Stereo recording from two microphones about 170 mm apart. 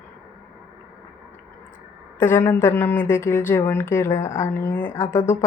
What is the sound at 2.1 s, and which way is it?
Speech, 15° left (ahead or behind).